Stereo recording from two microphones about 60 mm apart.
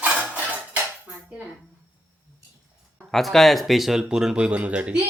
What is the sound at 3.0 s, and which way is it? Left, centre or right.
A woman's voice, centre.